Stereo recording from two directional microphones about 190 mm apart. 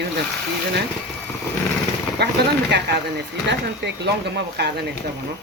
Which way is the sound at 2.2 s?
60° right (ahead or behind).